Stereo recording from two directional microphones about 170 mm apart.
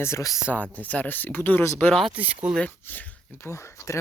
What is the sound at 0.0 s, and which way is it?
Speech, 20° left (ahead or behind).